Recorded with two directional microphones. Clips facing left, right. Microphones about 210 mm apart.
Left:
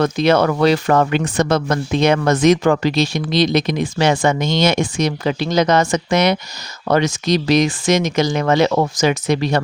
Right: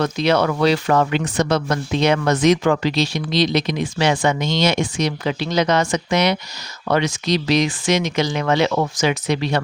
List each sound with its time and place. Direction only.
0.0 s speech: 50° left (ahead or behind)